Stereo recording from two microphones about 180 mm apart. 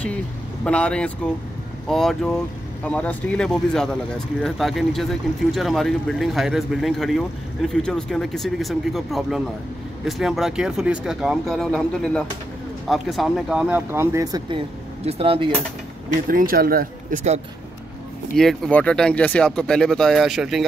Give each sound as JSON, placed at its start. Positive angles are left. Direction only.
{"t": 0.7, "sound": "speech", "side_deg": 5}
{"t": 15.0, "sound": "speech", "side_deg": -35}
{"t": 16.3, "sound": "speech", "side_deg": -55}
{"t": 18.4, "sound": "speech", "side_deg": 0}